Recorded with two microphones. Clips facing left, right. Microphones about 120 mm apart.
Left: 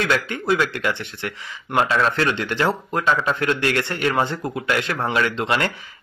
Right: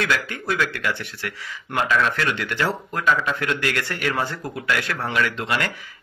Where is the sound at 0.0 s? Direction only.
25° left (ahead or behind).